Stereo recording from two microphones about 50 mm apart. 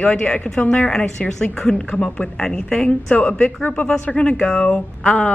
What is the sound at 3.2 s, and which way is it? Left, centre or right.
Speech, left.